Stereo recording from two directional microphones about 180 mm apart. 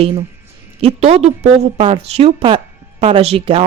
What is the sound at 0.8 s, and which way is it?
A woman's voice, 35° right (ahead or behind).